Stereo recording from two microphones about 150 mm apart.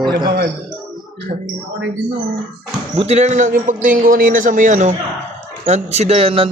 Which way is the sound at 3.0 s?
45° right (ahead or behind).